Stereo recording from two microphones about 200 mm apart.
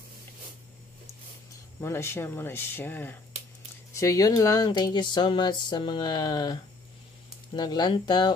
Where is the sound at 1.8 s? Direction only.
10° left (ahead or behind).